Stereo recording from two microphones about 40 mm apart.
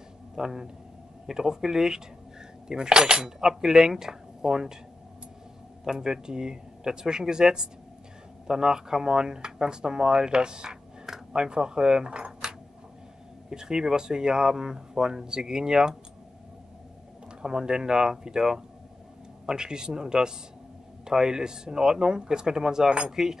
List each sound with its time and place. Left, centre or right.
0.4 s speech: centre
5.9 s speech: centre
12.3 s a sound: centre
13.5 s speech: centre
17.4 s speech: centre